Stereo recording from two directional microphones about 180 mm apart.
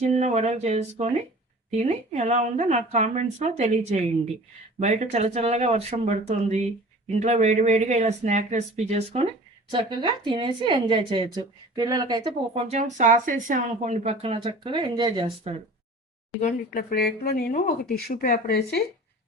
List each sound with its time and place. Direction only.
0.0 s speech: 40° right (ahead or behind)
9.7 s speech: 25° right (ahead or behind)
12.6 s speech: 40° right (ahead or behind)
16.4 s speech: 55° left (ahead or behind)